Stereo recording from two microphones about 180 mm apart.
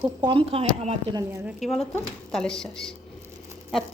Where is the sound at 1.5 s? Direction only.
Centre (ahead or behind).